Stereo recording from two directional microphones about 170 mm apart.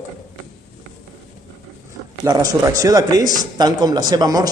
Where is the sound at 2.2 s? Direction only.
20° right (ahead or behind).